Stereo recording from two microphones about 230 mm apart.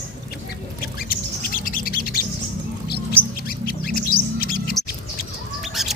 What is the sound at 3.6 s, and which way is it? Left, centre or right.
Bird, left.